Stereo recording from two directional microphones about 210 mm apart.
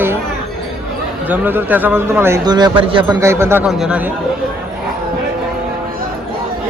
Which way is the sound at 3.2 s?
10° right (ahead or behind).